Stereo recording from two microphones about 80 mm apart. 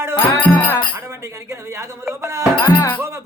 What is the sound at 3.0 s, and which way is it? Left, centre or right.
Music, right.